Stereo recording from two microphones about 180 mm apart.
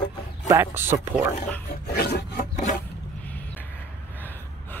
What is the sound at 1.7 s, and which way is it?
Filing, 60° left (ahead or behind).